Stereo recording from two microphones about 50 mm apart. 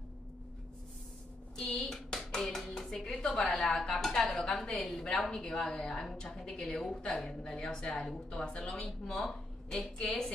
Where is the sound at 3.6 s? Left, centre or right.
Centre.